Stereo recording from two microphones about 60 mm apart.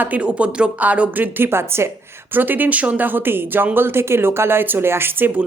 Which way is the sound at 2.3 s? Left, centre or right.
Right.